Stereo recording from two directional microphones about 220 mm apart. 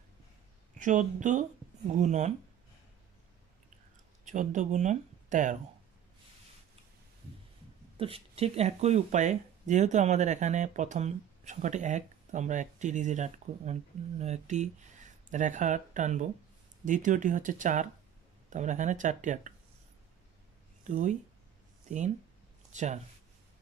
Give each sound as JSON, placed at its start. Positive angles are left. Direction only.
{"t": 0.7, "sound": "speech", "side_deg": -35}
{"t": 4.2, "sound": "speech", "side_deg": -35}
{"t": 8.0, "sound": "speech", "side_deg": -25}
{"t": 20.8, "sound": "speech", "side_deg": -35}